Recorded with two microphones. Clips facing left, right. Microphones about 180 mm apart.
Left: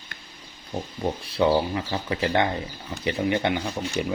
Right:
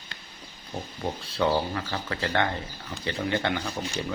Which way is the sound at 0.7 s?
20° left (ahead or behind).